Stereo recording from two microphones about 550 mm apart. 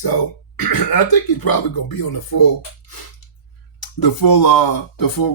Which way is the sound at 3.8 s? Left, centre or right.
Left.